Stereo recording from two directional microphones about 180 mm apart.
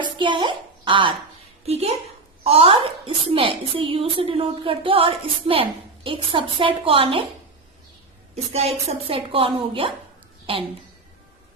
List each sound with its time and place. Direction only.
0.0 s a sound: 25° right (ahead or behind)
1.6 s a child's voice: 35° right (ahead or behind)
8.5 s a woman's voice: 35° right (ahead or behind)